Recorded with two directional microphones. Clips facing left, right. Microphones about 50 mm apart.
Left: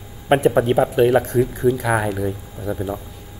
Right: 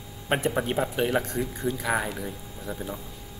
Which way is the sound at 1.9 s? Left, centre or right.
Centre.